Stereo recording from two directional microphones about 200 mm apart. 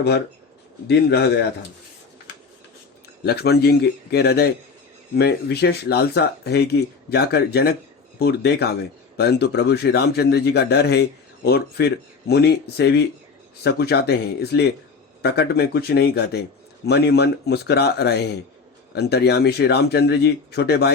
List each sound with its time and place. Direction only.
0.9 s a man's voice: 55° left (ahead or behind)
3.2 s a man's voice: 50° left (ahead or behind)